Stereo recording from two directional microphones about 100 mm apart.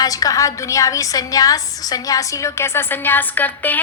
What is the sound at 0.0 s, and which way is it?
A woman's voice, 35° left (ahead or behind).